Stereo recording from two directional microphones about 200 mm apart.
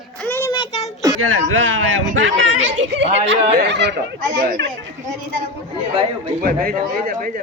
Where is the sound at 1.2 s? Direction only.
90° right; by 3.9 s 60° right (ahead or behind).